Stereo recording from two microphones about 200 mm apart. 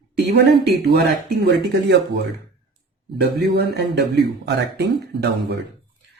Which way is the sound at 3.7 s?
55° right (ahead or behind).